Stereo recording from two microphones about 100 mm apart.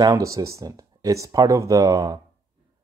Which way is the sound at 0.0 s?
35° right (ahead or behind).